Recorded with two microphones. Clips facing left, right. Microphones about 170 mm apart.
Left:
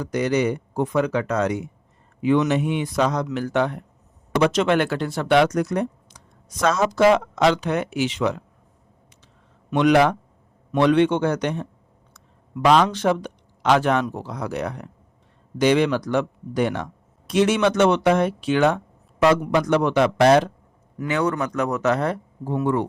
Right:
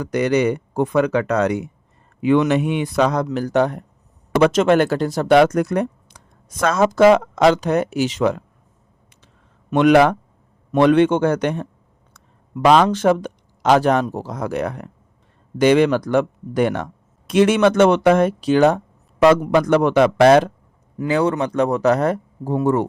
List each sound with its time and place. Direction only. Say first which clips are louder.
0.0 s speech: right 4 dB; 65° right (ahead or behind)
3.2 s speech: right 4 dB; 40° right (ahead or behind)
9.2 s a sound: even; 55° right (ahead or behind)
10.7 s speech: right 4 dB; 50° right (ahead or behind)
19.2 s speech: right 4 dB; 55° right (ahead or behind)
21.0 s speech: right 4 dB; 30° right (ahead or behind)